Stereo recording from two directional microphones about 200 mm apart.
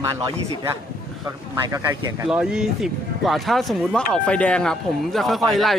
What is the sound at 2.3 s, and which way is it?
Speech, 5° right (ahead or behind).